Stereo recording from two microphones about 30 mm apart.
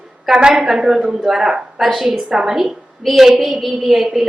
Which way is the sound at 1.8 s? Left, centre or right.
Centre.